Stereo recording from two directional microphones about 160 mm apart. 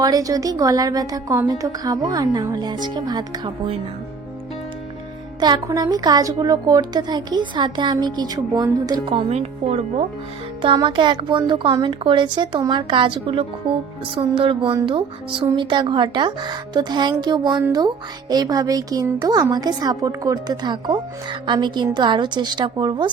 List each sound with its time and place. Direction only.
0.0 s speech: 20° right (ahead or behind)
5.4 s speech: 25° right (ahead or behind)